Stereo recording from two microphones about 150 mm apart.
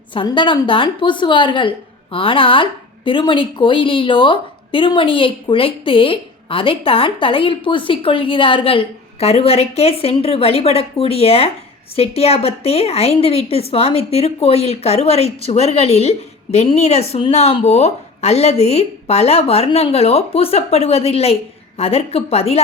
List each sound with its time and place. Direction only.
0.1 s a woman's voice: 35° left (ahead or behind)